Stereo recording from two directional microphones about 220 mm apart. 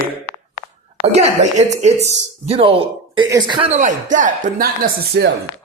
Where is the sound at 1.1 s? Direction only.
30° right (ahead or behind).